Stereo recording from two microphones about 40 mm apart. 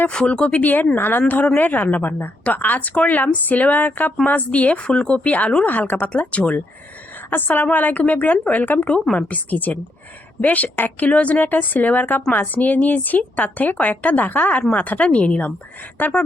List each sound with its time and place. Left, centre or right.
0.1 s speech: centre
0.4 s speech: left
0.9 s speech: left
1.5 s speech: left
4.9 s speech: left
5.3 s speech: left
5.6 s speech: left
6.3 s speech: left
7.3 s speech: left
11.3 s speech: left